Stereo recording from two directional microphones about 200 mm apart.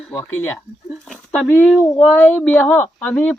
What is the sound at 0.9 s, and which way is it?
Speech, centre (ahead or behind).